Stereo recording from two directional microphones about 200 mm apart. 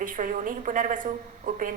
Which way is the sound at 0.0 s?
40° right (ahead or behind).